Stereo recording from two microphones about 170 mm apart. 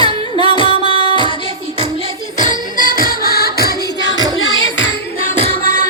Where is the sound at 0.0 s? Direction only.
30° right (ahead or behind).